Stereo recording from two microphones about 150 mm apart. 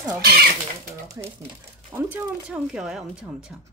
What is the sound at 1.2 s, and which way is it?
Speech, 25° right (ahead or behind).